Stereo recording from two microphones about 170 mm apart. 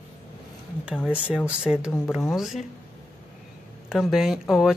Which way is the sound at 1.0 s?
5° right (ahead or behind).